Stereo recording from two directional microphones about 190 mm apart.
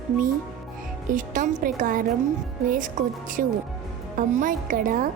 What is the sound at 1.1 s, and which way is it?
Speech, 40° right (ahead or behind).